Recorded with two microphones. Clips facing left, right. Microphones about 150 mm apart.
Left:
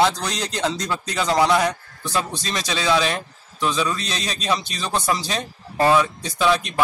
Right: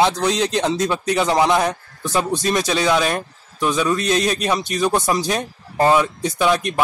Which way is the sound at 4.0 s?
60° right (ahead or behind).